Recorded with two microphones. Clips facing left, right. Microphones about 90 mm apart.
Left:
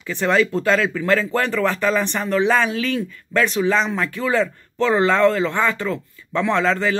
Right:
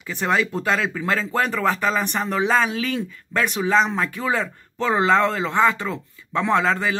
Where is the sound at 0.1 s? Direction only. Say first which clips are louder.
Left 4 dB; 15° right (ahead or behind).